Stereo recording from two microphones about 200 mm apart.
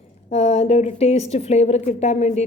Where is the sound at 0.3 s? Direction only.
35° left (ahead or behind).